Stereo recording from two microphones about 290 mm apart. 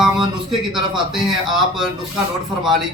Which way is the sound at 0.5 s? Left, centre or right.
Centre.